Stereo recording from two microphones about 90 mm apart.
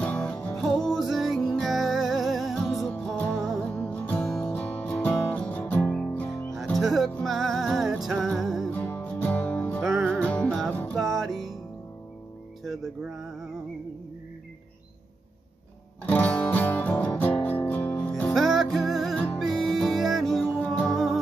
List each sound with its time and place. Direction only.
0.0 s music: 10° left (ahead or behind)
0.6 s music: centre (ahead or behind)
3.7 s music: 15° left (ahead or behind)
6.5 s music: centre (ahead or behind)
8.7 s music: 20° left (ahead or behind)
9.8 s music: centre (ahead or behind)
10.1 s music: 15° left (ahead or behind)
11.0 s music: centre (ahead or behind)
12.6 s a sound: centre (ahead or behind)
16.1 s music: 15° left (ahead or behind)
18.3 s music: centre (ahead or behind)
20.4 s music: 15° left (ahead or behind)